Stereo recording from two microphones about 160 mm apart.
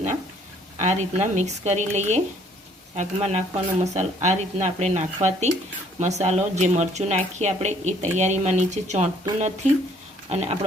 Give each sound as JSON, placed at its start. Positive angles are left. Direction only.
{"t": 0.8, "sound": "speech", "side_deg": -45}
{"t": 10.2, "sound": "speech", "side_deg": -40}